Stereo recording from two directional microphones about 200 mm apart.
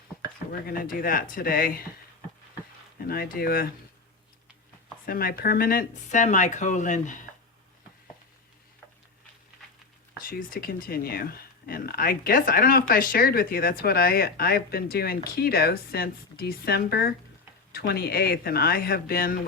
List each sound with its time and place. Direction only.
0.7 s speech: 45° left (ahead or behind)
3.1 s speech: 50° left (ahead or behind)
5.0 s speech: 45° left (ahead or behind)
10.2 s speech: 45° left (ahead or behind)